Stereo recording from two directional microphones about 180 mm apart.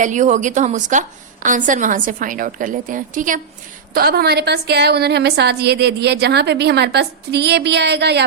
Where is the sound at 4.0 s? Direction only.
60° right (ahead or behind).